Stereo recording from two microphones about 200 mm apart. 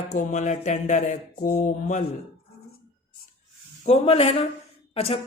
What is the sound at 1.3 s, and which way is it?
Mantra, 50° left (ahead or behind).